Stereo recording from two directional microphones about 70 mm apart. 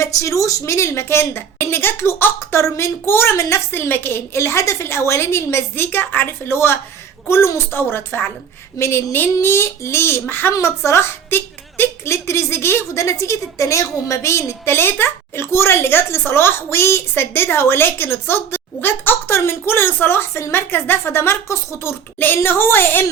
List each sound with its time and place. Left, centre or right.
0.0 s a woman's voice: left